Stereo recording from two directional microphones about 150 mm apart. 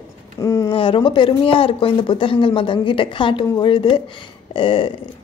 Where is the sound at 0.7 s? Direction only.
35° left (ahead or behind).